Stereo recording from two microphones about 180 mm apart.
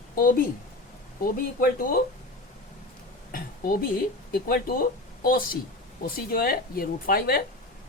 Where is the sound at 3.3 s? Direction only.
55° left (ahead or behind).